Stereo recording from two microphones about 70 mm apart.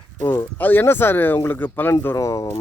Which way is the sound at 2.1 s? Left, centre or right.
Left.